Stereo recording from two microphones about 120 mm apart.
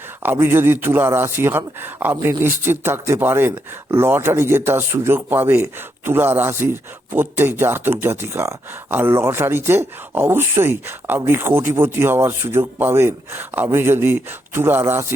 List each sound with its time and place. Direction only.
0.2 s speech: 15° right (ahead or behind)